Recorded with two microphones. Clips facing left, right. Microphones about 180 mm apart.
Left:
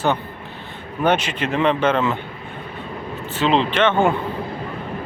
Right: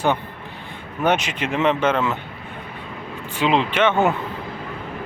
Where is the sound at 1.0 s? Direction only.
10° right (ahead or behind).